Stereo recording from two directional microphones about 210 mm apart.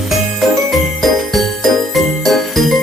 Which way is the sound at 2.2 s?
Centre (ahead or behind).